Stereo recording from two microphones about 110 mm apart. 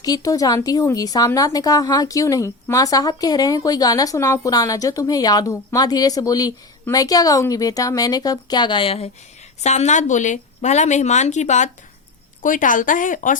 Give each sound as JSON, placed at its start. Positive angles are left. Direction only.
{"t": 0.0, "sound": "a woman's voice", "side_deg": 35}
{"t": 9.6, "sound": "a woman's voice", "side_deg": 90}